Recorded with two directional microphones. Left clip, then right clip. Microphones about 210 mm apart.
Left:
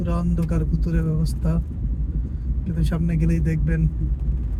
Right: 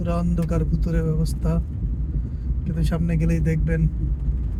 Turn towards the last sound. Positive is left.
turn(degrees=-20)  # may be behind; listen again after turning